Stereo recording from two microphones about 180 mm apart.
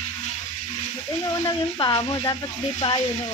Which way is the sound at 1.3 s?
20° left (ahead or behind).